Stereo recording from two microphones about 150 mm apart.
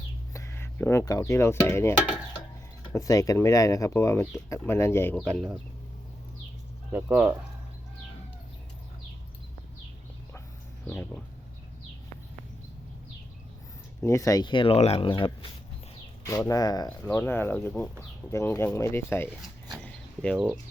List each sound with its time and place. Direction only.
0.3 s speech: 15° left (ahead or behind)
5.1 s speech: 5° left (ahead or behind)
6.9 s speech: 10° right (ahead or behind)
10.8 s speech: 10° left (ahead or behind)
14.0 s speech: 20° left (ahead or behind)
16.5 s speech: 25° left (ahead or behind)
17.1 s speech: 15° left (ahead or behind)
19.8 s a sound: 10° left (ahead or behind)